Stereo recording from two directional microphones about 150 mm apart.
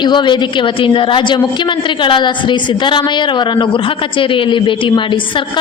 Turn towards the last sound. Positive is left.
turn(degrees=35)  # may be behind; listen again after turning